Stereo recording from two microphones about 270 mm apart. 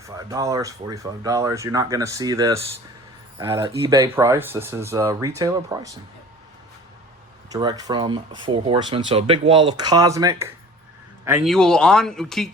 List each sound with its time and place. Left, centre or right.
0.0 s speech: centre
7.5 s speech: centre